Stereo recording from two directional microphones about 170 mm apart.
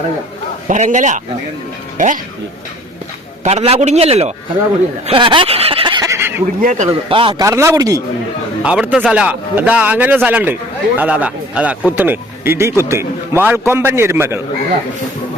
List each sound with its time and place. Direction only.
0.7 s speech: 45° right (ahead or behind)
3.4 s a man's voice: 40° right (ahead or behind)
5.0 s a sound: 30° right (ahead or behind); by 6.4 s 15° right (ahead or behind)
6.6 s speech: 50° right (ahead or behind)
7.1 s a man's voice: 30° right (ahead or behind)
7.4 s a man's voice: 15° right (ahead or behind)
8.6 s a man's voice: 5° right (ahead or behind)